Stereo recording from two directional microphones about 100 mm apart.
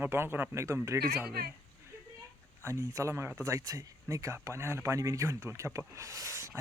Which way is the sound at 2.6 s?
30° right (ahead or behind).